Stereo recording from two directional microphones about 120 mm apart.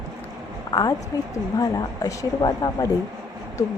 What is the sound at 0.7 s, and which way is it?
A woman's voice, 35° left (ahead or behind).